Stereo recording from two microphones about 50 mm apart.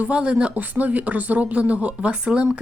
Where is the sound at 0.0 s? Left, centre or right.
Right.